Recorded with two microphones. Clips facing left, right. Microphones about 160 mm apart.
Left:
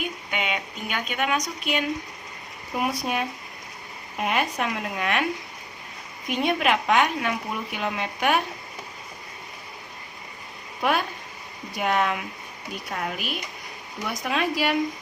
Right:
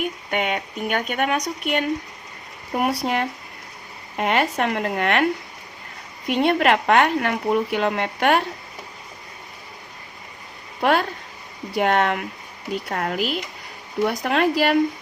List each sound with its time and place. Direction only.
0.3 s speech: 50° right (ahead or behind)
2.7 s speech: 70° right (ahead or behind)
10.8 s a woman's voice: 65° right (ahead or behind)